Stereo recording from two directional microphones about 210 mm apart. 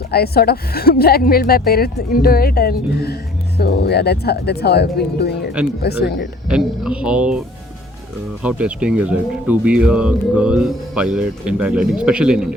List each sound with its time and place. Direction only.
0.1 s speech: 50° left (ahead or behind)
6.5 s speech: 5° right (ahead or behind)